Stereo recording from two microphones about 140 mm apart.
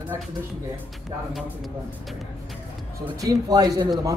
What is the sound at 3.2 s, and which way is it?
Speech, 25° right (ahead or behind).